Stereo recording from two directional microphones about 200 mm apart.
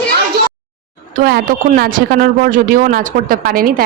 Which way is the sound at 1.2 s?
50° right (ahead or behind).